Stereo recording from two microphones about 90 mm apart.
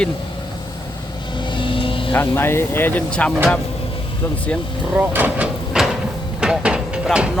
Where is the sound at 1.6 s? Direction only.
75° left (ahead or behind).